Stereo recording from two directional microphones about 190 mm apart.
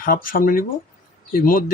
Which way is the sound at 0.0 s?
50° left (ahead or behind).